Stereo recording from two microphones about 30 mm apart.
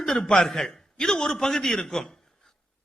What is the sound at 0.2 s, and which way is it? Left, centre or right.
A man's voice, left.